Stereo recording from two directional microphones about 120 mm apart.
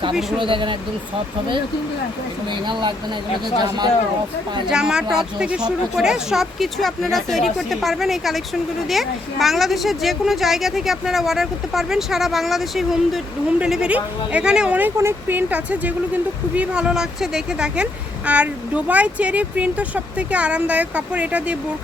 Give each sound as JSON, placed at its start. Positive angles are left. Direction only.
{"t": 0.1, "sound": "speech", "side_deg": -5}
{"t": 0.3, "sound": "speech", "side_deg": -45}
{"t": 4.7, "sound": "speech", "side_deg": -5}